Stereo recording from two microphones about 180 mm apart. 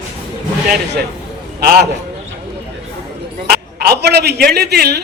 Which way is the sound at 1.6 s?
60° right (ahead or behind).